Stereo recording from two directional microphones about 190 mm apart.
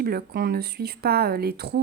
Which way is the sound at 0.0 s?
55° right (ahead or behind).